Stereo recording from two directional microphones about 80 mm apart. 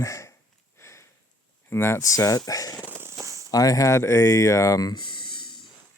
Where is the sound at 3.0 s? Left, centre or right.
Right.